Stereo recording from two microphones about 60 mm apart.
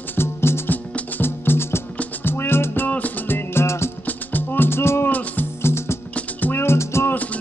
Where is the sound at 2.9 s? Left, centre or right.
Left.